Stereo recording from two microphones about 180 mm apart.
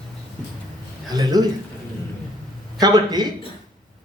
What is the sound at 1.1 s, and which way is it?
Speech, 20° right (ahead or behind).